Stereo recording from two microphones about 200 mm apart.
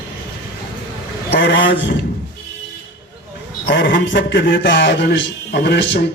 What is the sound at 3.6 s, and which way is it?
A man's voice, 60° left (ahead or behind).